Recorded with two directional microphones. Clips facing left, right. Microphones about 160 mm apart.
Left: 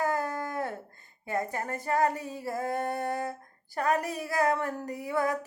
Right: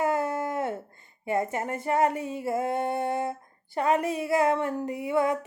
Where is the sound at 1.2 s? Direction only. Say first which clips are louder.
Right 4 dB; 20° right (ahead or behind).